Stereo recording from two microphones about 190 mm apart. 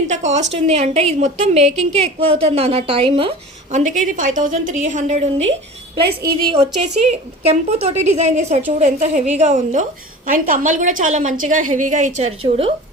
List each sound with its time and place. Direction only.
0.1 s a woman's voice: 40° right (ahead or behind)
3.8 s a woman's voice: 40° right (ahead or behind)
6.0 s a woman's voice: 60° right (ahead or behind)
7.1 s a woman's voice: 35° right (ahead or behind)